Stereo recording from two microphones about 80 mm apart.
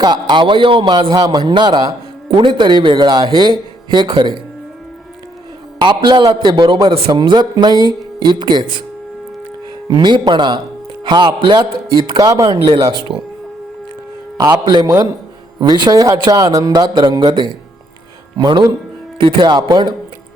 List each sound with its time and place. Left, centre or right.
0.0 s speech: right
2.3 s speech: right
5.8 s speech: right
9.9 s speech: right
12.1 s speech: right
12.7 s speech: right
14.6 s speech: right
15.6 s music: right
18.3 s music: right
19.4 s speech: right